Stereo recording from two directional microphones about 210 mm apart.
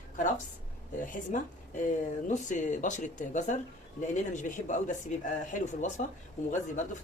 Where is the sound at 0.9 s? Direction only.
40° left (ahead or behind).